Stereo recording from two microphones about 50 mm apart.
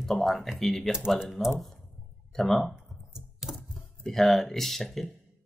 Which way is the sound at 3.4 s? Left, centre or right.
Centre.